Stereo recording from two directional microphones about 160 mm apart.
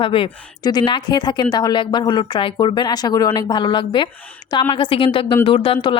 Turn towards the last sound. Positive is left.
turn(degrees=35)  # may be behind; listen again after turning